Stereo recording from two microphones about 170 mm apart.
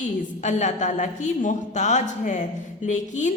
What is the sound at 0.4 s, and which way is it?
A woman's voice, 45° left (ahead or behind).